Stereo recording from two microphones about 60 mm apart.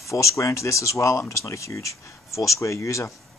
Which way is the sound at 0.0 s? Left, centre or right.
Left.